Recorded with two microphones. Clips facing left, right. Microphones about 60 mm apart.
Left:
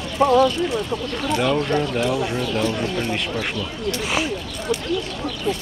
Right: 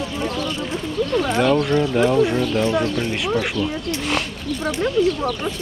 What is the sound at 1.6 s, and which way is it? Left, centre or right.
Speech, centre.